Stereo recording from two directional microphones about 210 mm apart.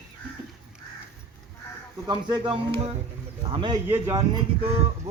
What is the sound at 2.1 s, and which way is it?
Speech, 20° right (ahead or behind).